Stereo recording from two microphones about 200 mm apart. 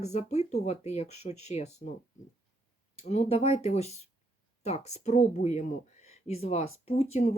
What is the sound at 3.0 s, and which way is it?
Speech, 30° left (ahead or behind).